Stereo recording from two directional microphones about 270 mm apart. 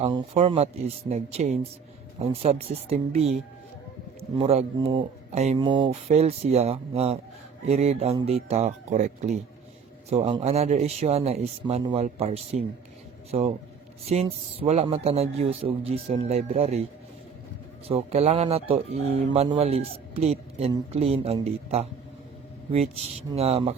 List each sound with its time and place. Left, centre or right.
0.0 s speech: right
17.8 s speech: right
23.3 s speech: right